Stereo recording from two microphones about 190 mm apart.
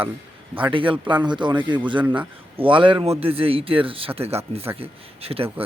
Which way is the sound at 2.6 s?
25° right (ahead or behind).